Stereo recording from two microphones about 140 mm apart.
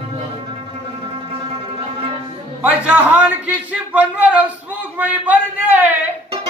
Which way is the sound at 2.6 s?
10° right (ahead or behind).